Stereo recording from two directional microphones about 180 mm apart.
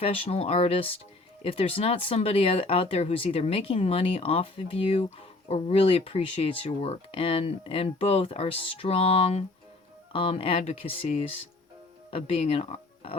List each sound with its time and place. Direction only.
0.0 s speech: 30° left (ahead or behind)